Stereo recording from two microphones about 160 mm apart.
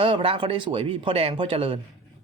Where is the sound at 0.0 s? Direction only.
35° right (ahead or behind).